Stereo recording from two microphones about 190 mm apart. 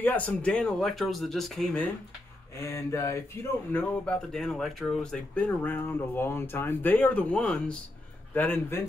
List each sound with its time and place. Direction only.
0.0 s speech: 5° left (ahead or behind)
2.6 s speech: 15° left (ahead or behind)